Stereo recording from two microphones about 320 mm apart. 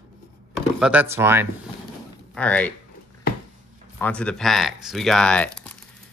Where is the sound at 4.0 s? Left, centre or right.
Centre.